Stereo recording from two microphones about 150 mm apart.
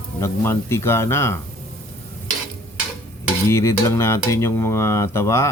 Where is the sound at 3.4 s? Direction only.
20° left (ahead or behind).